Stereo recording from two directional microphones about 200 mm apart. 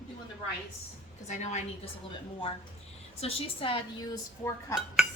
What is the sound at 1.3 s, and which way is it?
Speech, 35° left (ahead or behind).